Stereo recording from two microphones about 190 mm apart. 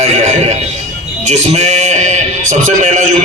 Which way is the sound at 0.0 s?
35° right (ahead or behind).